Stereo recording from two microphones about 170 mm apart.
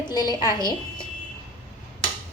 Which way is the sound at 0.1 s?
25° left (ahead or behind).